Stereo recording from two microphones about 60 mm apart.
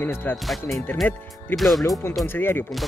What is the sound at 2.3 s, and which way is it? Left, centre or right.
Speech, left.